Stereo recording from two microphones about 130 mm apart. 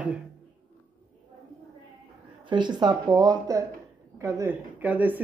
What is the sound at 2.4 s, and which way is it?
Speech, 35° right (ahead or behind).